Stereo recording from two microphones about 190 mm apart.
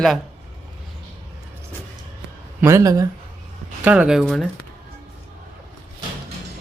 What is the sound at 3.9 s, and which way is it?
Speech, 5° right (ahead or behind).